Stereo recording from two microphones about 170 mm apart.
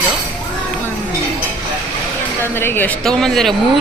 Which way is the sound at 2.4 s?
15° left (ahead or behind).